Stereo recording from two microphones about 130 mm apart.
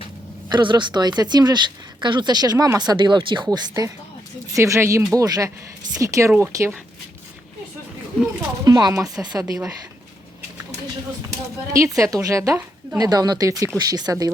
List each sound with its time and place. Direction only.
0.5 s speech: 35° right (ahead or behind); by 6.7 s 20° right (ahead or behind)
8.6 s speech: 30° right (ahead or behind)
11.7 s speech: 25° right (ahead or behind)
13.0 s speech: 30° right (ahead or behind)